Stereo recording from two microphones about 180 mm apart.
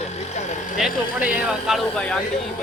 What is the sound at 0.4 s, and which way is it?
Vehicle, 40° left (ahead or behind).